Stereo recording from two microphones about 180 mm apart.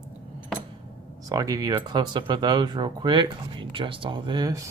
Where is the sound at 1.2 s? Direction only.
20° right (ahead or behind).